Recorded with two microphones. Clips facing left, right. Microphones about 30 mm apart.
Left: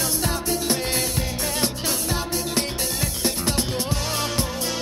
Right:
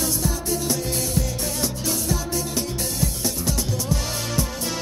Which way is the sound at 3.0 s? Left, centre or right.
Left.